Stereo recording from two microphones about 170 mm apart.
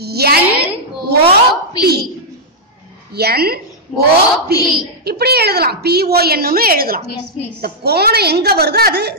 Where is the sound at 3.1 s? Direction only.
65° right (ahead or behind).